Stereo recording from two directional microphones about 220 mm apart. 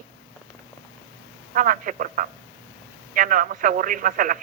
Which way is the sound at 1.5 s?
40° right (ahead or behind).